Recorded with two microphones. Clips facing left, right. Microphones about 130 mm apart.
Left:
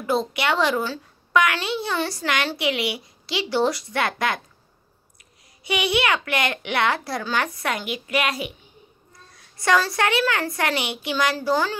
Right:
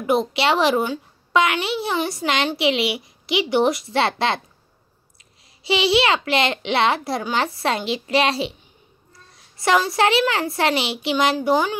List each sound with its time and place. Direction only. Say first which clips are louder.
0.0 s a woman's voice: right 4 dB; 20° right (ahead or behind)
5.7 s a woman's voice: right 4 dB; 25° right (ahead or behind)